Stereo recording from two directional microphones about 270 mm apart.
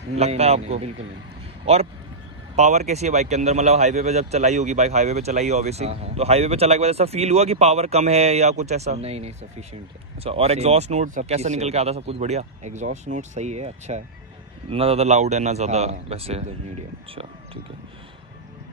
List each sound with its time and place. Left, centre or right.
0.1 s speech: right
2.5 s speech: right